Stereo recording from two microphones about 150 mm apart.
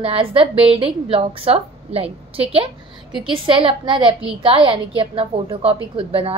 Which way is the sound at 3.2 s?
35° right (ahead or behind).